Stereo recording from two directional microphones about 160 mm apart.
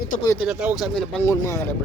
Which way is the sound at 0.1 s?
55° left (ahead or behind).